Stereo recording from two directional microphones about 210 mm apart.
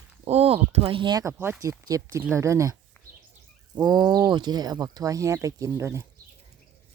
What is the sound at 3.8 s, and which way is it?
Speech, 20° right (ahead or behind).